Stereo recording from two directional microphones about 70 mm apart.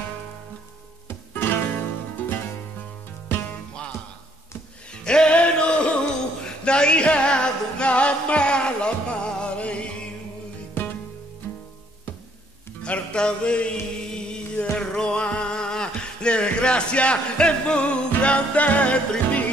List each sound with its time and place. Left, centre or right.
1.3 s music: left
5.0 s music: centre
10.8 s music: left
12.8 s music: centre